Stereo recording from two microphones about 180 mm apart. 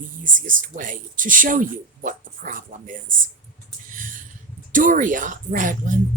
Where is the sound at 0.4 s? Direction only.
50° right (ahead or behind).